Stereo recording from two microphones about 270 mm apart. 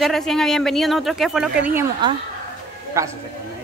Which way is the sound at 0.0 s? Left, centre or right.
Centre.